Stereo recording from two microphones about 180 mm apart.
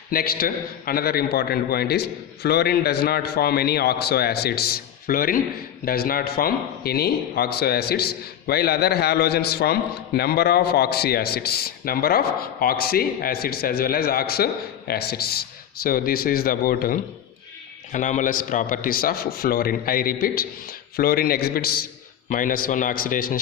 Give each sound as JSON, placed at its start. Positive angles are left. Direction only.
{"t": 0.1, "sound": "a man's voice", "side_deg": 55}